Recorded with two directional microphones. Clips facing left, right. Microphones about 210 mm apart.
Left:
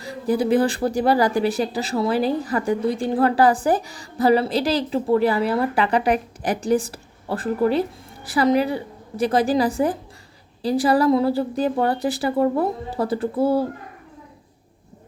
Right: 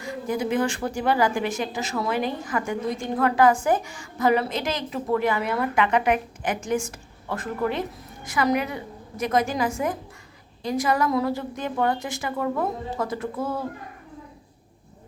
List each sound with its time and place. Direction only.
0.0 s speech: 35° left (ahead or behind)